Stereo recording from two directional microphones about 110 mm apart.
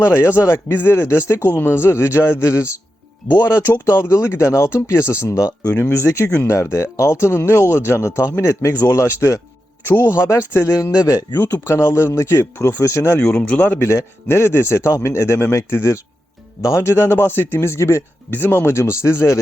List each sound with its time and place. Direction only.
0.0 s speech: 25° left (ahead or behind)
13.1 s speech: 15° left (ahead or behind)